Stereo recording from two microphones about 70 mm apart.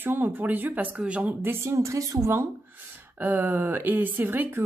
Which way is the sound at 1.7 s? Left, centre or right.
Right.